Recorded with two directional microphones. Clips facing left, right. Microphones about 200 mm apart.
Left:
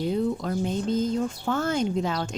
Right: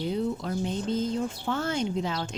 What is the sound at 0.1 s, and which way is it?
Speech, 45° left (ahead or behind).